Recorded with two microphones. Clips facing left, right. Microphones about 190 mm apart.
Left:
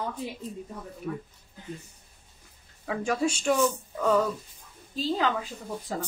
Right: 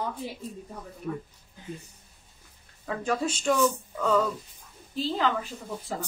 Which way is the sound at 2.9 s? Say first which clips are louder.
Left 1 dB; 10° left (ahead or behind).